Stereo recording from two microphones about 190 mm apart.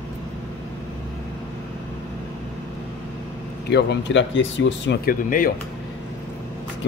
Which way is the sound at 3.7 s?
65° left (ahead or behind).